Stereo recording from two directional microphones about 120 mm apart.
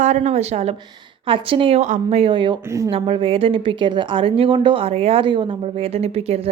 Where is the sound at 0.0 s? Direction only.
75° right (ahead or behind); by 0.8 s 60° right (ahead or behind).